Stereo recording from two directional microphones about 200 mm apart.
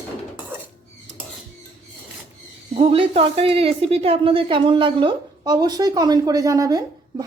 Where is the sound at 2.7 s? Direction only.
30° right (ahead or behind).